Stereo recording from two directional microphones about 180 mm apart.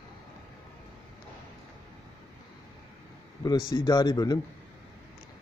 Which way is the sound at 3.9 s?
20° left (ahead or behind).